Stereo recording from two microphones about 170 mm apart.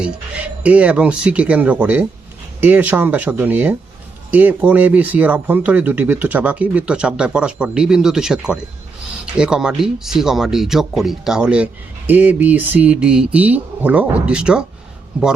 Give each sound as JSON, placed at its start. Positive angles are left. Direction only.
{"t": 0.0, "sound": "speech", "side_deg": -10}